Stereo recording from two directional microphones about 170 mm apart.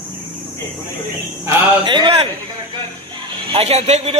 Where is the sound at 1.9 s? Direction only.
30° right (ahead or behind).